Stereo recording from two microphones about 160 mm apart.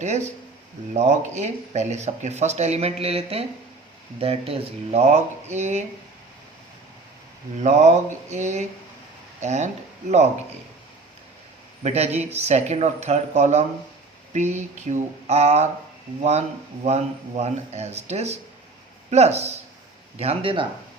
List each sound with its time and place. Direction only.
0.0 s speech: 45° right (ahead or behind)
7.6 s speech: 45° right (ahead or behind)
11.8 s speech: 40° right (ahead or behind)
16.8 s speech: 45° right (ahead or behind)